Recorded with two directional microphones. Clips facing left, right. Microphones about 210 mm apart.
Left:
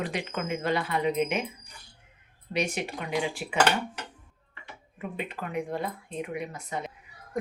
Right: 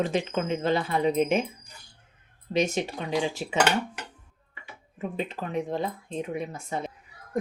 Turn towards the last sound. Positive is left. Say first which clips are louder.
# right 2 dB
turn(degrees=-25)  # may be behind; listen again after turning